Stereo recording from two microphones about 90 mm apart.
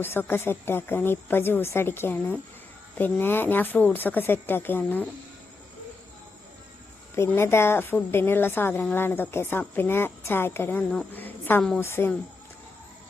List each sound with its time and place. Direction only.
0.0 s a woman's voice: 25° left (ahead or behind)
7.2 s a woman's voice: 30° left (ahead or behind)
11.1 s a sound: 20° left (ahead or behind)
11.8 s a woman's voice: 25° left (ahead or behind)